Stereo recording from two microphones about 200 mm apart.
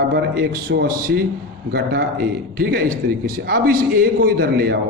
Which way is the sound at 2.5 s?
50° right (ahead or behind).